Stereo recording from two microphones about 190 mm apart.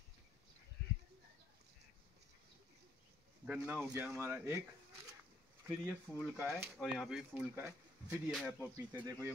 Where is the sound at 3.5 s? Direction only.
5° right (ahead or behind).